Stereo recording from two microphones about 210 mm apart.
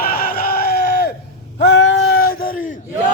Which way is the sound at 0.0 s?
45° left (ahead or behind).